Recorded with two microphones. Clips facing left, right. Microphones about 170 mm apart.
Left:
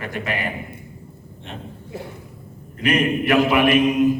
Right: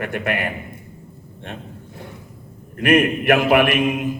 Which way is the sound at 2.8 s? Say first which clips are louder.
Right 3 dB; 55° right (ahead or behind).